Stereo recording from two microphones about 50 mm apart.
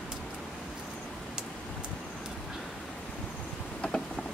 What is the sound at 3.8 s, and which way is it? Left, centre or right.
Vehicle, left.